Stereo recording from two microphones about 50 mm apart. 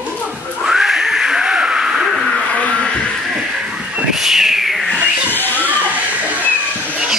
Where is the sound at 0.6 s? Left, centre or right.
Centre.